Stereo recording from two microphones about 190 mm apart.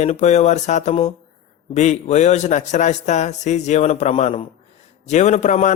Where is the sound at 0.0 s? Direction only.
35° left (ahead or behind).